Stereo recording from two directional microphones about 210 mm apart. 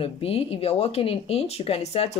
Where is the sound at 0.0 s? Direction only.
25° left (ahead or behind).